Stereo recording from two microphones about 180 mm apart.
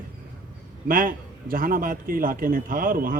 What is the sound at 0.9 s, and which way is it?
A man's voice, 50° right (ahead or behind).